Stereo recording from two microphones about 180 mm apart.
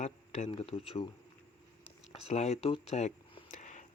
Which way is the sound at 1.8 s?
35° left (ahead or behind).